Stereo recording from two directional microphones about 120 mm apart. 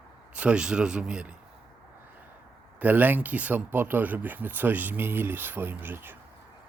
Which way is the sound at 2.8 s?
15° right (ahead or behind).